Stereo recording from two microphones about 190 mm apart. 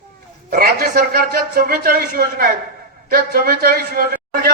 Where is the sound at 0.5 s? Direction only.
55° right (ahead or behind).